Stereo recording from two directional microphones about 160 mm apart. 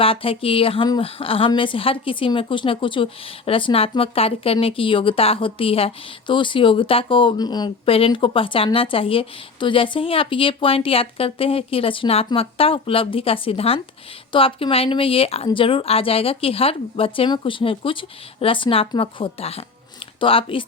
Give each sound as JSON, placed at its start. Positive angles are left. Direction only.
{"t": 0.0, "sound": "a woman's voice", "side_deg": 35}